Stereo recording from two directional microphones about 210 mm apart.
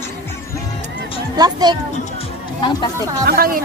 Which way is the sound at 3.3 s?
45° right (ahead or behind).